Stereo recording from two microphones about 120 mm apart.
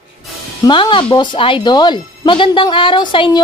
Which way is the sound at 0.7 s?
45° left (ahead or behind).